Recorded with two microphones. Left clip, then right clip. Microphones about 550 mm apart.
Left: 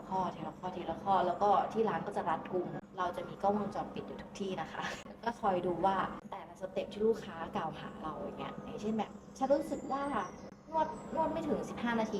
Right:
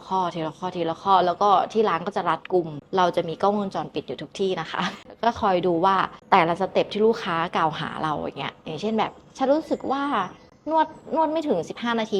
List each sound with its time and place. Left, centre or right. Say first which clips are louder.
0.1 s a woman's voice: right 12 dB; right
2.9 s a woman's voice: right 18 dB; right
11.3 s a woman's voice: right 12 dB; right